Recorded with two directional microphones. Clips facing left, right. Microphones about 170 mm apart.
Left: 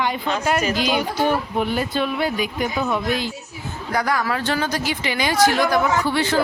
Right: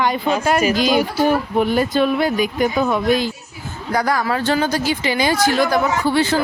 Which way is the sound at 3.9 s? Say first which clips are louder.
Right 3 dB; 35° right (ahead or behind).